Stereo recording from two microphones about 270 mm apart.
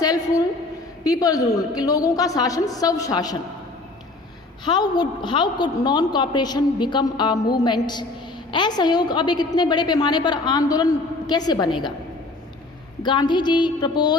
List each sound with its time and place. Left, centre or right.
0.0 s a sound: centre
1.0 s a woman's voice: centre
4.6 s a woman's voice: centre
13.0 s a woman's voice: centre